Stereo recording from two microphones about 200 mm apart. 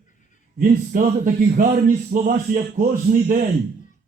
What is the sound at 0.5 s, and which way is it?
Speech, 40° right (ahead or behind).